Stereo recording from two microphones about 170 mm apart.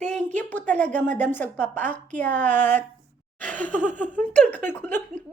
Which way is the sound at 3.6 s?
45° right (ahead or behind).